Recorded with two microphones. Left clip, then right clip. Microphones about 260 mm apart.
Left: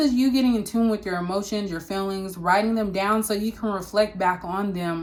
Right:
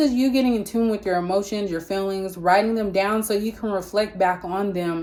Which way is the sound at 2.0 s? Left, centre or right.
Left.